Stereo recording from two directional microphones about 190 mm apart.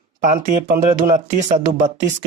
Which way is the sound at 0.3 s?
45° right (ahead or behind).